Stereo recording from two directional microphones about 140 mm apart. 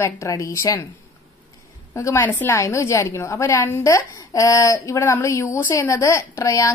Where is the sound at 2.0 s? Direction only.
20° left (ahead or behind).